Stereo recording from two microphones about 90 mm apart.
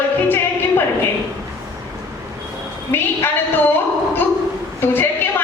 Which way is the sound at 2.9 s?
25° left (ahead or behind).